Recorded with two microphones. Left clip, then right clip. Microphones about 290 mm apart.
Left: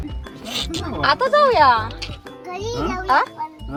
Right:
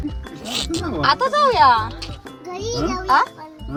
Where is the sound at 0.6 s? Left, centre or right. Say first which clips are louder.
Right 1 dB; centre.